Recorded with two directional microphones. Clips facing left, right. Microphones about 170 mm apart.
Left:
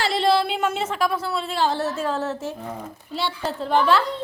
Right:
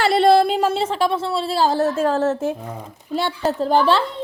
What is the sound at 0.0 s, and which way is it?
A woman's voice, 55° right (ahead or behind).